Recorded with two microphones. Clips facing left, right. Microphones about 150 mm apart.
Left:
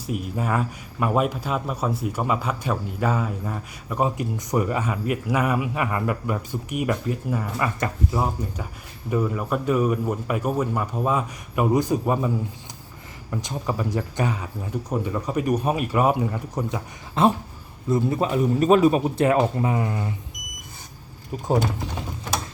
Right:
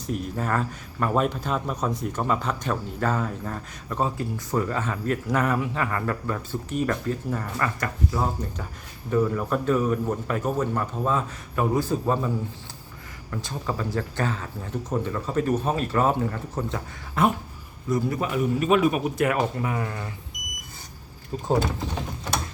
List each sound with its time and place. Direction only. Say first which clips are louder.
0.1 s speech: left 1 dB; 10° left (ahead or behind)
13.3 s speech: left 3 dB; 15° left (ahead or behind)
17.2 s a man's voice: left 3 dB; 25° left (ahead or behind)